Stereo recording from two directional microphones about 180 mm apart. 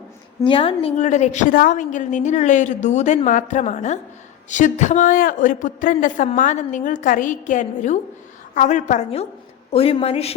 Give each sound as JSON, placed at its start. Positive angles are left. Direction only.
{"t": 0.4, "sound": "a woman's voice", "side_deg": 30}